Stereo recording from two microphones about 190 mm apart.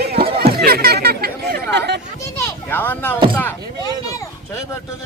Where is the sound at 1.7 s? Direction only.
65° right (ahead or behind).